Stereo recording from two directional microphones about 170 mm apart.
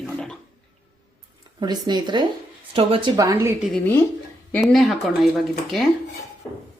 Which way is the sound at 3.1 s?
15° right (ahead or behind).